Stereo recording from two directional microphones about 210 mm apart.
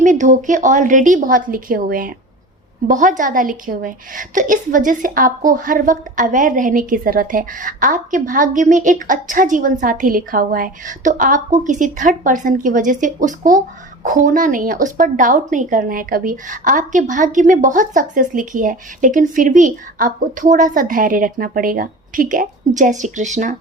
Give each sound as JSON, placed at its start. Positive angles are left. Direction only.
{"t": 0.0, "sound": "a woman's voice", "side_deg": -35}